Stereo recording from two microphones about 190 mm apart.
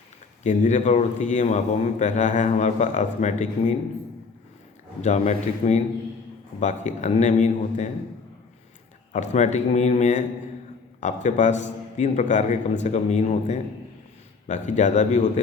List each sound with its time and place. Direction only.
0.4 s a man's voice: 40° left (ahead or behind)
5.0 s a man's voice: 40° left (ahead or behind)
9.1 s a man's voice: 40° left (ahead or behind)